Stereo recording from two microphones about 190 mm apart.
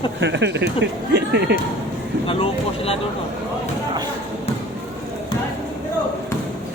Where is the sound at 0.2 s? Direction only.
70° right (ahead or behind).